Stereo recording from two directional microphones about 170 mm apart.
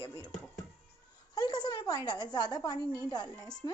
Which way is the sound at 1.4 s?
25° left (ahead or behind).